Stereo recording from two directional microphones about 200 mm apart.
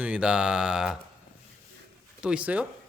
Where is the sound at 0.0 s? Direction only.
5° right (ahead or behind).